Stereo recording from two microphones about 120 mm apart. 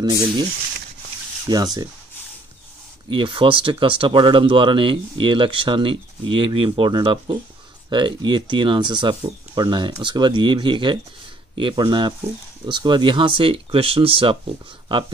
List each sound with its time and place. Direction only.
0.0 s speech: 35° right (ahead or behind)
1.5 s speech: 35° right (ahead or behind)
3.1 s speech: 45° right (ahead or behind)